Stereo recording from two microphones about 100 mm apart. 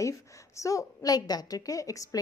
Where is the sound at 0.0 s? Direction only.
30° left (ahead or behind).